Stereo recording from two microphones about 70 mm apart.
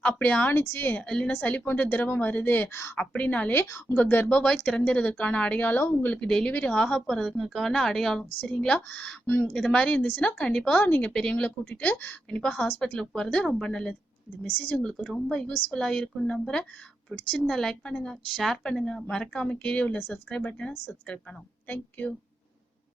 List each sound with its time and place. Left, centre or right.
0.0 s a woman's voice: left
1.0 s a woman's voice: centre
1.3 s a woman's voice: left
3.5 s a woman's voice: left
3.9 s a woman's voice: left
6.1 s a woman's voice: centre
8.9 s a woman's voice: left
9.5 s a woman's voice: centre
10.8 s a woman's voice: left
14.4 s a woman's voice: left
14.8 s a woman's voice: centre; by 22.1 s left